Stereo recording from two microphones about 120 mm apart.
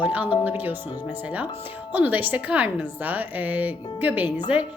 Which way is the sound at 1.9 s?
15° right (ahead or behind).